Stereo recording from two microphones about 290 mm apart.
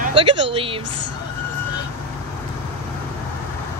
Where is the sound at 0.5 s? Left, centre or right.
Centre.